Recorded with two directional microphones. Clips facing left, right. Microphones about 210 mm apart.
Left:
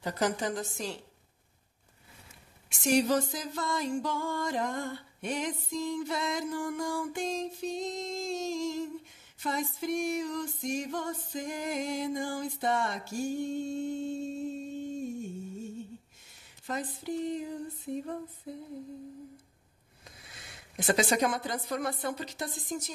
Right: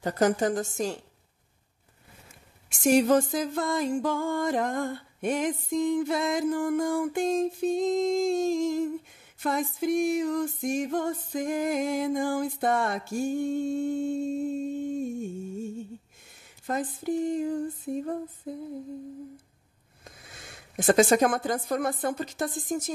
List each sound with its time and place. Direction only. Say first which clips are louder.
0.0 s music: right 7 dB; 45° right (ahead or behind)
2.7 s music: right 5 dB; 50° right (ahead or behind)
16.6 s music: right 6 dB; 50° right (ahead or behind)
20.7 s music: right 7 dB; 50° right (ahead or behind)